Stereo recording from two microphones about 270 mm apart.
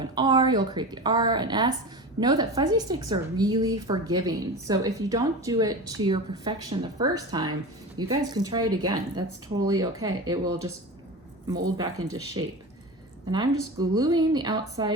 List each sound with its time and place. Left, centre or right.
0.0 s a woman's voice: centre